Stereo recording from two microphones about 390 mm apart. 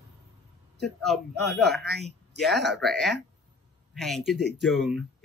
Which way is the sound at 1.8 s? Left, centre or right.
Right.